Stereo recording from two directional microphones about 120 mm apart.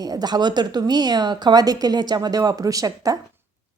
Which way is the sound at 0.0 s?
35° right (ahead or behind).